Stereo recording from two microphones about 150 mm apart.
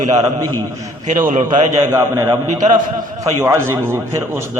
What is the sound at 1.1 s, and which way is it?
Speech, 55° right (ahead or behind).